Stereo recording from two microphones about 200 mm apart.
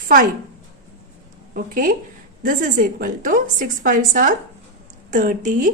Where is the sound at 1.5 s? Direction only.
45° right (ahead or behind).